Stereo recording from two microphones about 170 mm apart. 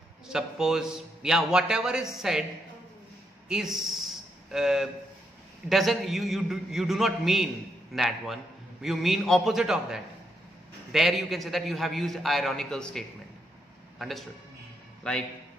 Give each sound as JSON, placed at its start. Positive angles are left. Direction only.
{"t": 0.3, "sound": "a man's voice", "side_deg": -5}
{"t": 3.4, "sound": "a man's voice", "side_deg": -5}